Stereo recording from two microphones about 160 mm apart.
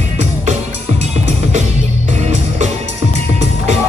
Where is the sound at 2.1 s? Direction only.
45° right (ahead or behind).